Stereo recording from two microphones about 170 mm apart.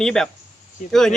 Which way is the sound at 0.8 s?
45° left (ahead or behind).